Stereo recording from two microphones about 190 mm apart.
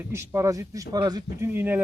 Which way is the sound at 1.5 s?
10° right (ahead or behind).